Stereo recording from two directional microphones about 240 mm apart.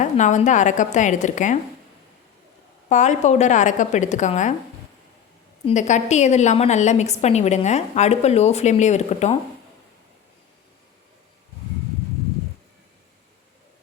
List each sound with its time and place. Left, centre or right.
0.0 s a woman's voice: left
2.9 s a woman's voice: left
5.6 s a woman's voice: left